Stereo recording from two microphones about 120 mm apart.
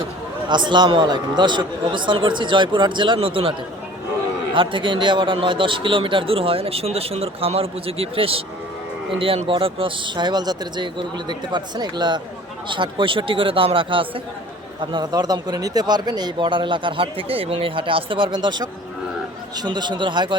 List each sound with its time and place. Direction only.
0.4 s speech: 40° right (ahead or behind)
4.5 s a man's voice: 45° right (ahead or behind)